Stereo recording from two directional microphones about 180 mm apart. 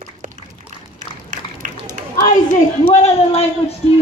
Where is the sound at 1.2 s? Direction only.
45° right (ahead or behind).